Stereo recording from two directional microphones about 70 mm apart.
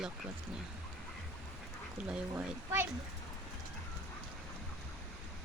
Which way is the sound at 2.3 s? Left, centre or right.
Right.